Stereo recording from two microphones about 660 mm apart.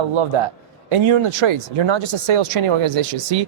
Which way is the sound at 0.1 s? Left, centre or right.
Right.